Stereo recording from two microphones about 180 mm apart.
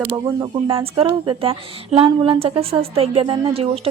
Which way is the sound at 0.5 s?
30° right (ahead or behind).